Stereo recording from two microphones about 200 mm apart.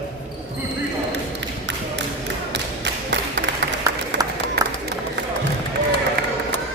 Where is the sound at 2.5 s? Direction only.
60° right (ahead or behind).